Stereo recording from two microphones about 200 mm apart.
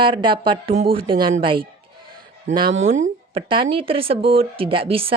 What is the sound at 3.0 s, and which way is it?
Speech, 25° right (ahead or behind).